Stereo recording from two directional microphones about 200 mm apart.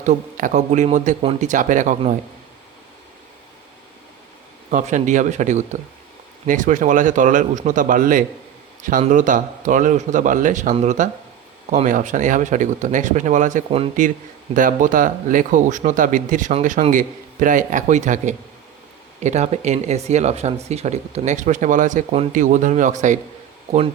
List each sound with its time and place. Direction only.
0.0 s speech: 40° right (ahead or behind)
4.7 s speech: 40° right (ahead or behind)
14.5 s speech: 40° right (ahead or behind)